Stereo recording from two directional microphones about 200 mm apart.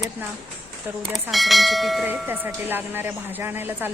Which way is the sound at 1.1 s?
Centre (ahead or behind).